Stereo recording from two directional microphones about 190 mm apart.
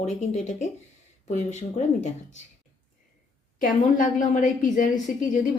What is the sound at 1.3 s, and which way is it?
Speech, 40° left (ahead or behind).